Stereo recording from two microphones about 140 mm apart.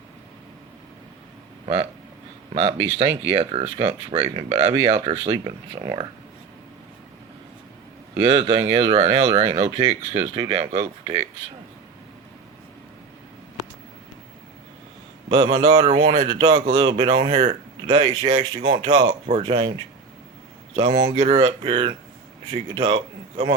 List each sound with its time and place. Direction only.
1.6 s speech: 40° right (ahead or behind)
8.1 s speech: 40° right (ahead or behind)
15.3 s a man's voice: 40° right (ahead or behind)
20.7 s speech: 35° right (ahead or behind)